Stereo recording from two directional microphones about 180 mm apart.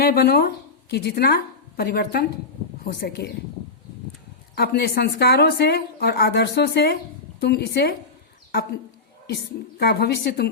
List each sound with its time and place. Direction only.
0.0 s a woman's voice: 60° left (ahead or behind)
4.5 s speech: 60° left (ahead or behind)
9.3 s speech: 60° left (ahead or behind)